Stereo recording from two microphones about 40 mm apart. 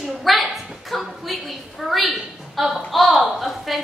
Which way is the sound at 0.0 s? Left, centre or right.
Centre.